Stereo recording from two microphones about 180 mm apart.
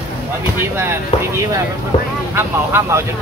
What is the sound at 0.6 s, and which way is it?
Speech, 15° right (ahead or behind).